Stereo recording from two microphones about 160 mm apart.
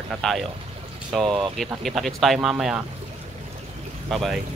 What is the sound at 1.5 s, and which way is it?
Speech, centre (ahead or behind).